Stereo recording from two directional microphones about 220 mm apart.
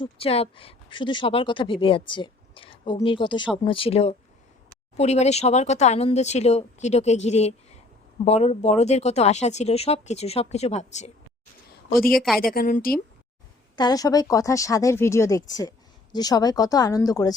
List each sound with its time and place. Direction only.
0.0 s speech: 25° left (ahead or behind)
12.1 s a woman's voice: centre (ahead or behind)
12.5 s a woman's voice: 40° left (ahead or behind)
13.7 s speech: 20° left (ahead or behind)